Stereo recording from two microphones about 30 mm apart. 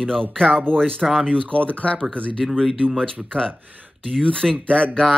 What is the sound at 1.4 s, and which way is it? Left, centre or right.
Speech, left.